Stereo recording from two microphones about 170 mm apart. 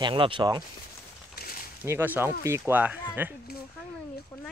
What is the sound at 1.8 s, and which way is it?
Speech, 15° right (ahead or behind).